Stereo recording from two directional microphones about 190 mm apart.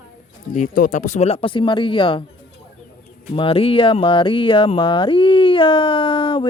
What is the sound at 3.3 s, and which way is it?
Speech, 30° left (ahead or behind).